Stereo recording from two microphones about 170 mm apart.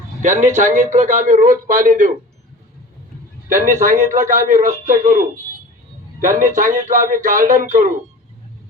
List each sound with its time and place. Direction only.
0.2 s a man's voice: 45° right (ahead or behind)
3.7 s a man's voice: 50° right (ahead or behind)